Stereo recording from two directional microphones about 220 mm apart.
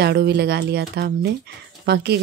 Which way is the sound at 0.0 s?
50° right (ahead or behind).